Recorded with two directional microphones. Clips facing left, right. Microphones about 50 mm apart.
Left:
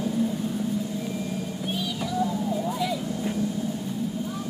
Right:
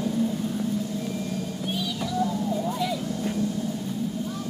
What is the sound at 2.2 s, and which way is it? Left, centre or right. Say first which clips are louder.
Vehicle: even; centre.